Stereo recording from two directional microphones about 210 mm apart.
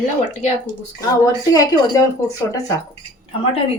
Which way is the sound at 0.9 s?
15° left (ahead or behind).